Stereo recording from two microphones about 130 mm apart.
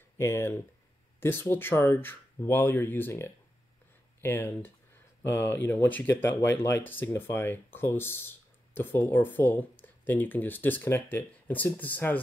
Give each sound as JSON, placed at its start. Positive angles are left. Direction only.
{"t": 0.2, "sound": "speech", "side_deg": 20}